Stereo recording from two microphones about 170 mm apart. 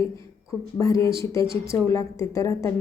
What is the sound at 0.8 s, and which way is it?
A woman's voice, 20° left (ahead or behind).